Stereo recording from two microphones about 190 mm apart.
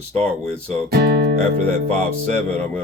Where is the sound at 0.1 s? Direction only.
35° right (ahead or behind).